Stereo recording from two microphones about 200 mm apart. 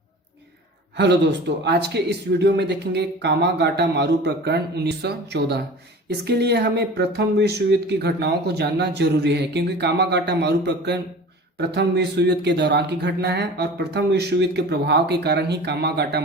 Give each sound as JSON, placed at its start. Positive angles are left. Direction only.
{"t": 0.9, "sound": "speech", "side_deg": -60}